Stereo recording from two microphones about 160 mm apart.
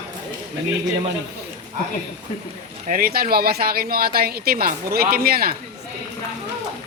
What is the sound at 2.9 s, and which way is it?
Speech, 65° right (ahead or behind).